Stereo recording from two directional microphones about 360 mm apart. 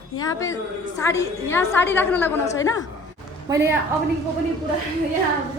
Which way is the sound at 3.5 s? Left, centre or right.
Centre.